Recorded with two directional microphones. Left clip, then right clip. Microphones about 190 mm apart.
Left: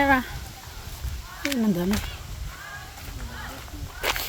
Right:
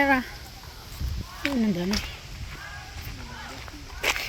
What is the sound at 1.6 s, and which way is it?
Speech, 15° left (ahead or behind).